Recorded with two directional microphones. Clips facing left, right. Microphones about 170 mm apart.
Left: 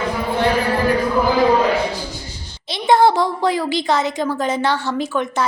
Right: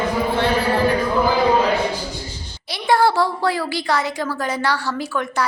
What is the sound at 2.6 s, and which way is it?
Speech, 20° left (ahead or behind).